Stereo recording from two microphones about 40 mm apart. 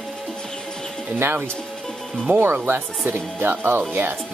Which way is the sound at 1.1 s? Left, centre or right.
Right.